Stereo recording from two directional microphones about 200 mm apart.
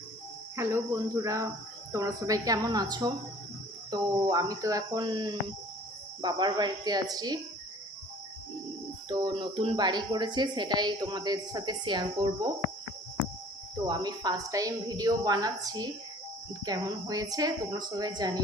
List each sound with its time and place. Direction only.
0.5 s a woman's voice: 15° right (ahead or behind)
9.0 s speech: 20° right (ahead or behind)
13.8 s speech: 20° right (ahead or behind)